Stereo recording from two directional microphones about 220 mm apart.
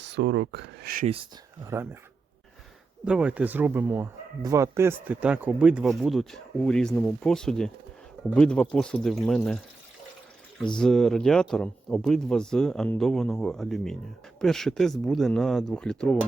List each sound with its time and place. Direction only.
0.0 s speech: 55° right (ahead or behind)
1.0 s speech: 25° right (ahead or behind)
1.6 s speech: 10° right (ahead or behind)
3.0 s speech: 5° right (ahead or behind)
10.8 s speech: 5° left (ahead or behind)